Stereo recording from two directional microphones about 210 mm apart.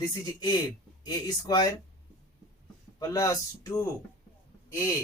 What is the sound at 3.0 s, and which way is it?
Speech, 15° left (ahead or behind).